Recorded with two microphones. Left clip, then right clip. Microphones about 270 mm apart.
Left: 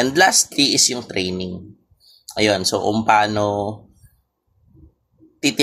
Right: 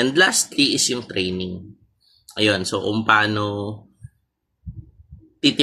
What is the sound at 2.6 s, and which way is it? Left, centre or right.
Speech, centre.